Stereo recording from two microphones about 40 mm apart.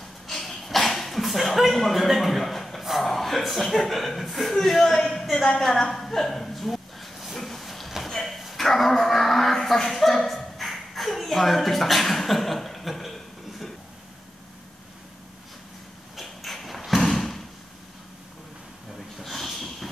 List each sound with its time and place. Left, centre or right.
0.3 s a sound: centre
2.8 s speech: centre
4.9 s speech: centre
5.6 s a sound: centre
8.0 s cattle: centre
16.2 s thump: centre
19.1 s snort: centre